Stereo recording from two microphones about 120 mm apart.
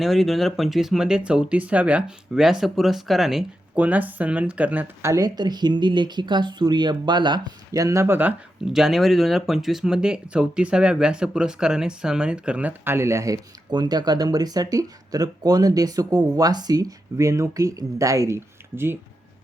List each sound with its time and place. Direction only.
0.0 s speech: centre (ahead or behind)
5.1 s speech: 35° right (ahead or behind); by 8.4 s 15° right (ahead or behind)
8.6 s speech: 5° right (ahead or behind); by 18.9 s 20° right (ahead or behind)